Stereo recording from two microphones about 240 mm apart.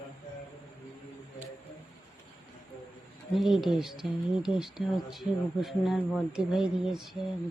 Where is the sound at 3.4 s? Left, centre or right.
Centre.